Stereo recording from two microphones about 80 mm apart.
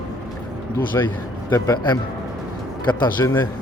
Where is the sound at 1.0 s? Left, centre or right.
Left.